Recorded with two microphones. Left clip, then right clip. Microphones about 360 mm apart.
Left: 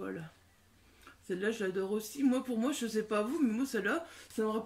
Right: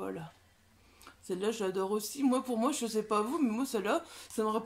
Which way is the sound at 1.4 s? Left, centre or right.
Centre.